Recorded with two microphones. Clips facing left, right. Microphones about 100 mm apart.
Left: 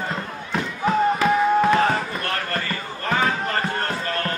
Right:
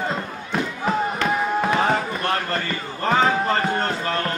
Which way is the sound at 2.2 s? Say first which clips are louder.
Right 3 dB; 25° right (ahead or behind).